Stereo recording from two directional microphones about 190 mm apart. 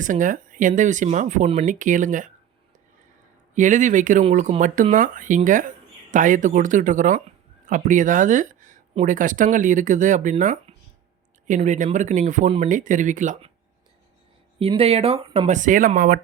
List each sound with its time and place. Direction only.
0.0 s speech: 45° right (ahead or behind)
3.5 s speech: 40° right (ahead or behind)
14.6 s speech: 30° right (ahead or behind); by 16.2 s 45° right (ahead or behind)